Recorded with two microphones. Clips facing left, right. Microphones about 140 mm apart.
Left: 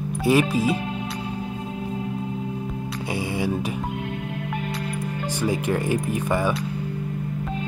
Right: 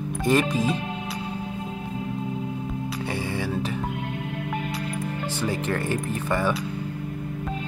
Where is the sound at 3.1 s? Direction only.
15° left (ahead or behind).